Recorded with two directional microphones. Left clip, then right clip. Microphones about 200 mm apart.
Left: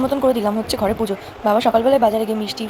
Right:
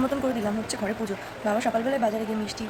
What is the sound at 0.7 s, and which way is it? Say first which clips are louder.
Speech: left 10 dB; 25° left (ahead or behind).